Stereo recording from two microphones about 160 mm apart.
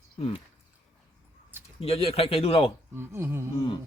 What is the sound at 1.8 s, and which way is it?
Speech, 35° left (ahead or behind).